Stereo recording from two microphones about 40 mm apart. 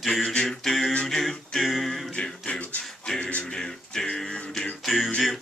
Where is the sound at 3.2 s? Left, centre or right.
Left.